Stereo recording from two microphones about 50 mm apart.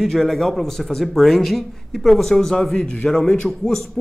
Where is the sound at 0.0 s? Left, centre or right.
Centre.